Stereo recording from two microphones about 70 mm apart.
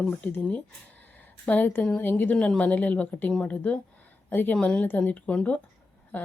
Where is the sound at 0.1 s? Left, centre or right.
Left.